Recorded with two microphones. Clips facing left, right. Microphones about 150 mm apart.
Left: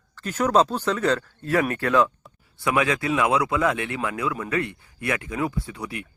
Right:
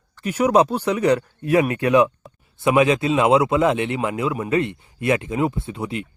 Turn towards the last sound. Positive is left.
turn(degrees=-25)  # may be behind; listen again after turning